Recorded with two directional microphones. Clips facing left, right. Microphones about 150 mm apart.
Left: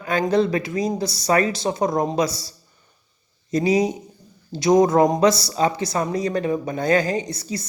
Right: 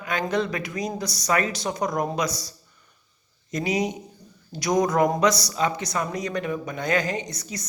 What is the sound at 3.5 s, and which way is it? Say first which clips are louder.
Speech: left 6 dB; 30° left (ahead or behind).